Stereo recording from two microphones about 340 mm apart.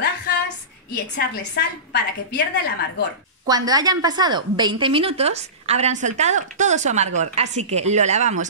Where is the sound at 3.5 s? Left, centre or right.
Centre.